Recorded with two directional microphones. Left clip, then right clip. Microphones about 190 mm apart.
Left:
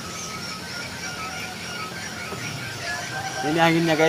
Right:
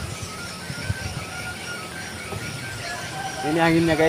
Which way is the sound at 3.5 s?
35° left (ahead or behind).